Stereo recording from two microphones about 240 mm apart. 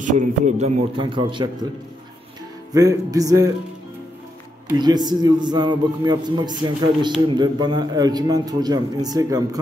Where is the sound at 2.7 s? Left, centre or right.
Centre.